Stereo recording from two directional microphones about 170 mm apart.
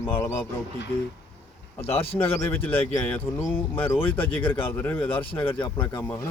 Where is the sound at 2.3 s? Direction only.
15° left (ahead or behind).